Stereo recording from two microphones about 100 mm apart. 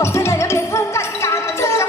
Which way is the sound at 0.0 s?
25° left (ahead or behind).